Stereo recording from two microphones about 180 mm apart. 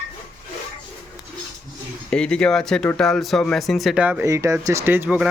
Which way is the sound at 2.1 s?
5° left (ahead or behind).